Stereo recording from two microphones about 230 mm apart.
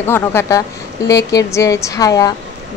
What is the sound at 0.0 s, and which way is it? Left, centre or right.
A woman's voice, centre.